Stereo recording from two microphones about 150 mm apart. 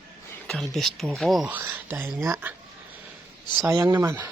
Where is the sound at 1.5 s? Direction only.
15° right (ahead or behind).